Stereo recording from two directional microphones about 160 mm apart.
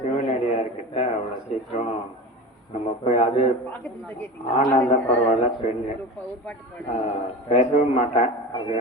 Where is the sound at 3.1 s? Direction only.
40° left (ahead or behind).